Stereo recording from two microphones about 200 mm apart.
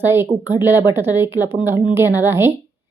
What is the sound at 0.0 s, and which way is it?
Speech, 10° right (ahead or behind).